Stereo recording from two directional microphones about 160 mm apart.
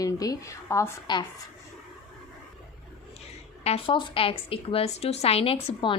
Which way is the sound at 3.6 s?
35° left (ahead or behind).